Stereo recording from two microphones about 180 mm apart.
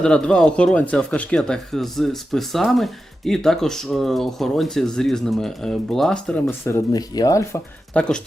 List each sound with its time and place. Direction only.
0.0 s speech: 5° left (ahead or behind)
6.7 s speech: 15° left (ahead or behind)
7.9 s speech: 5° left (ahead or behind)